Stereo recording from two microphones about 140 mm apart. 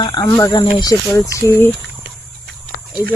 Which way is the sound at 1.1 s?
20° left (ahead or behind).